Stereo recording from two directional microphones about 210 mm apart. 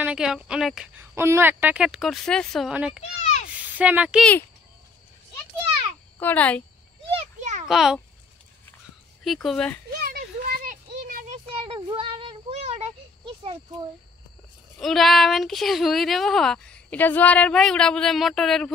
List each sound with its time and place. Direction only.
0.0 s a woman's voice: 5° right (ahead or behind)
3.2 s a sound: 30° left (ahead or behind)
3.7 s speech: 5° right (ahead or behind)
6.1 s a child's voice: 10° left (ahead or behind)
7.1 s a sound: 30° right (ahead or behind)
7.6 s a woman's voice: centre (ahead or behind)
9.2 s a woman's voice: centre (ahead or behind)
10.0 s a sound: 45° right (ahead or behind); by 13.8 s 20° right (ahead or behind)
14.8 s a woman's voice: centre (ahead or behind)